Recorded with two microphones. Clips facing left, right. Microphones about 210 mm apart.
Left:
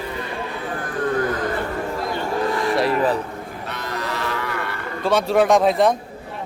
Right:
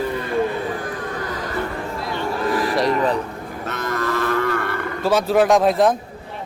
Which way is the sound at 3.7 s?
45° right (ahead or behind).